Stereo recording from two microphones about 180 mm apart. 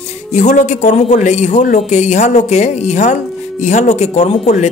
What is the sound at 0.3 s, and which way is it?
Speech, 40° left (ahead or behind).